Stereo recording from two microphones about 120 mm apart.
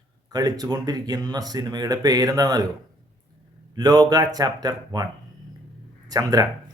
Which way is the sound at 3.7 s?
35° right (ahead or behind).